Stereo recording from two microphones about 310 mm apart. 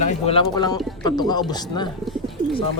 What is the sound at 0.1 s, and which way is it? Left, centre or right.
Speech, centre.